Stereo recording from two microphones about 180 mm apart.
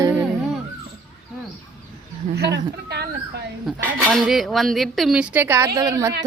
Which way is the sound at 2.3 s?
65° right (ahead or behind).